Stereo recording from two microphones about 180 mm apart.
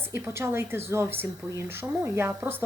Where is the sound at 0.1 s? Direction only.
15° right (ahead or behind).